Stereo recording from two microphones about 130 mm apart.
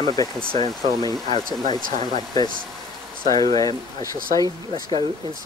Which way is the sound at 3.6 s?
25° left (ahead or behind).